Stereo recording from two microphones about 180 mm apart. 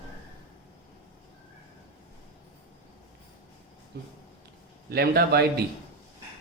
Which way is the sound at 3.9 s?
60° right (ahead or behind).